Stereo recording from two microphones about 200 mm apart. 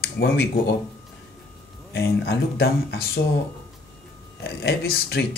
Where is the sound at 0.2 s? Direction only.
55° left (ahead or behind).